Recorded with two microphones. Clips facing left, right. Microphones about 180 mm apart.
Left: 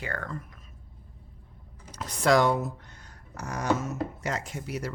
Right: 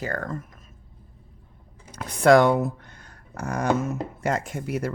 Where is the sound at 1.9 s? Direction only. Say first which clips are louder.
Right 6 dB; 55° right (ahead or behind).